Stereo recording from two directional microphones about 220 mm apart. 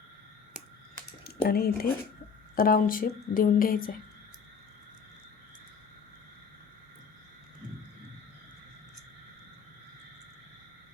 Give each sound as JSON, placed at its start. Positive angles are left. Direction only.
{"t": 1.2, "sound": "a woman's voice", "side_deg": 45}